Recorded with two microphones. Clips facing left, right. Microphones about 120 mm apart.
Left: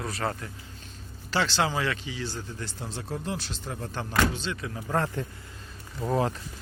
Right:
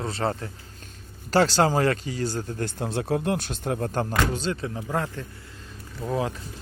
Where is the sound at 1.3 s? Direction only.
40° right (ahead or behind).